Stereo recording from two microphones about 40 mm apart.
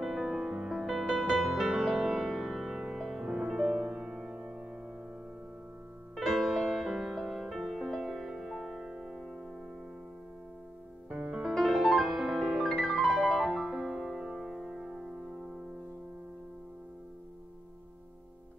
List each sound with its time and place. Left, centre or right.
0.0 s music: centre
3.3 s music: centre
4.4 s music: right
6.1 s music: centre
7.5 s music: centre
8.8 s music: centre
11.1 s music: right
11.5 s piano: centre
12.0 s music: centre
12.7 s music: centre
13.7 s music: centre